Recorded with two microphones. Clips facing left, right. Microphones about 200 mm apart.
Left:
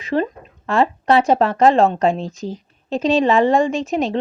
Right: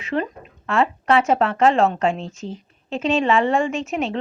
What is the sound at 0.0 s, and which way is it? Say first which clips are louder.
Speech: left 4 dB; 35° left (ahead or behind).